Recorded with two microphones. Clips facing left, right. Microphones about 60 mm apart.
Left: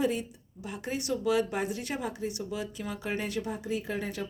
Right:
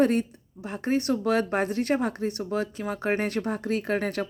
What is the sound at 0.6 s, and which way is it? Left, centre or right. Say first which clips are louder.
Speech: right 8 dB; right.